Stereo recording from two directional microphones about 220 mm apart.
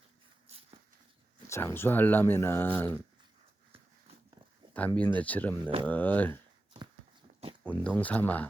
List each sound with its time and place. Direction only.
0.5 s a sound: 30° right (ahead or behind)
1.5 s speech: 10° left (ahead or behind)
4.9 s speech: 5° left (ahead or behind)
6.7 s walk: 20° right (ahead or behind)
7.6 s speech: 5° left (ahead or behind)